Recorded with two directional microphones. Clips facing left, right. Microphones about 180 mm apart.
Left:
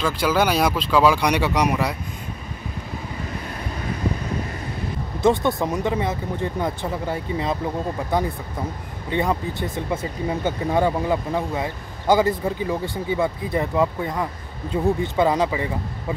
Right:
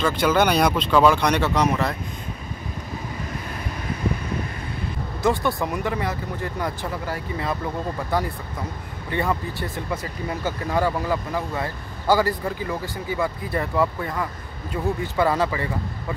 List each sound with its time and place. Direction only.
0.0 s speech: 5° left (ahead or behind)
5.2 s speech: 20° left (ahead or behind)